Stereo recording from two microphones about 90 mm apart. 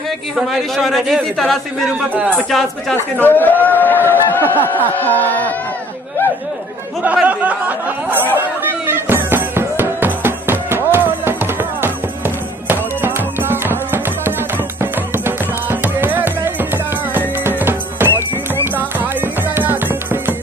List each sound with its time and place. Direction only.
0.4 s a man's voice: centre (ahead or behind)
2.2 s speech: 10° left (ahead or behind)
3.0 s a man's voice: 20° left (ahead or behind)
7.2 s speech: 20° right (ahead or behind)
8.4 s music: 20° right (ahead or behind)
12.6 s music: 20° right (ahead or behind)